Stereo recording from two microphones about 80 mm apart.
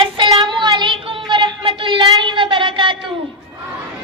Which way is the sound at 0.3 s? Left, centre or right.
Right.